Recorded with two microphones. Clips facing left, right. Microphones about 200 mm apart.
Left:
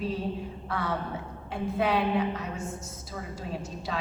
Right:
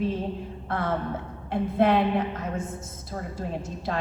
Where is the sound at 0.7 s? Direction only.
50° right (ahead or behind).